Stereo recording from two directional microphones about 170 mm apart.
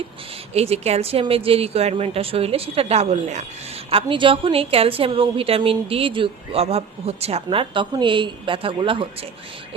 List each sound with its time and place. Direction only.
0.5 s a woman's voice: 35° right (ahead or behind)